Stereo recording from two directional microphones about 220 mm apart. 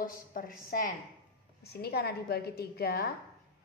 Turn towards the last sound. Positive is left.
turn(degrees=45)  # may be behind; listen again after turning